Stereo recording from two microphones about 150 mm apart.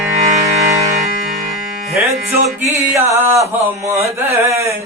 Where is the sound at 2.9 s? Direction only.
20° right (ahead or behind).